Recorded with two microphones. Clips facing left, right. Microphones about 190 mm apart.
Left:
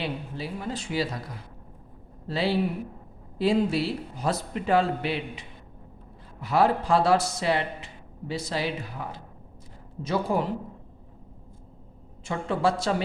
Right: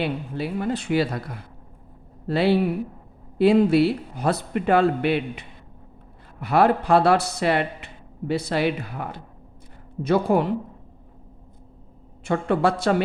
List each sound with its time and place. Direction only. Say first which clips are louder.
0.0 s a man's voice: right 6 dB; 60° right (ahead or behind)
12.2 s a man's voice: right 5 dB; 60° right (ahead or behind)